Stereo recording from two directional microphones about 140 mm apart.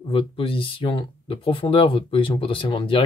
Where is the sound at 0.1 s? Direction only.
40° left (ahead or behind).